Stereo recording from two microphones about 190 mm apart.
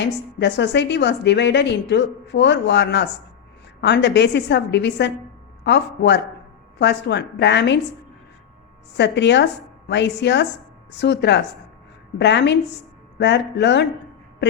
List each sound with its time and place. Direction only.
0.0 s a woman's voice: 65° left (ahead or behind)
9.0 s a woman's voice: 65° left (ahead or behind)